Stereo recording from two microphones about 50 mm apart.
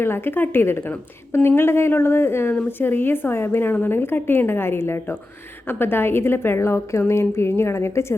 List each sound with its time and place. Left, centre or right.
0.0 s a woman's voice: left
6.6 s a woman's voice: left